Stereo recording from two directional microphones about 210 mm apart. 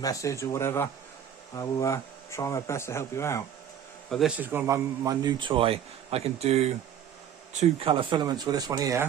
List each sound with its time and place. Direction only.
0.0 s speech: 15° left (ahead or behind)
4.1 s a man's voice: 5° right (ahead or behind)